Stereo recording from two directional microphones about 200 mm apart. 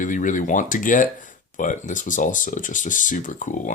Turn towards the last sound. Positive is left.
turn(degrees=40)  # may be behind; listen again after turning